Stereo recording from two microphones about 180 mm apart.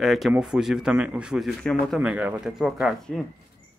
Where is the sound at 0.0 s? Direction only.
Centre (ahead or behind).